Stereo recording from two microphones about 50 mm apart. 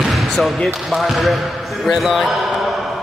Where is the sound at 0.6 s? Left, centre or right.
Centre.